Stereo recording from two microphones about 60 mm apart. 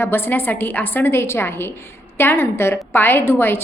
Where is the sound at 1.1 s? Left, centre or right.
Left.